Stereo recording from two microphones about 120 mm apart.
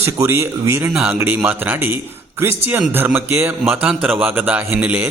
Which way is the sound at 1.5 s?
15° right (ahead or behind).